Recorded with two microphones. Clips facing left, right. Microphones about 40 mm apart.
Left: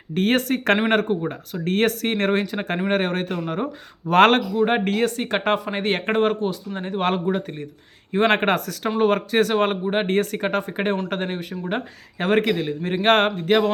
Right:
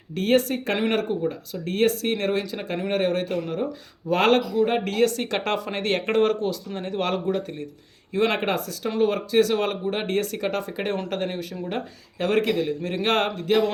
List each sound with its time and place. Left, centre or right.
0.1 s speech: left
4.1 s speech: left; by 7.0 s centre
7.0 s speech: left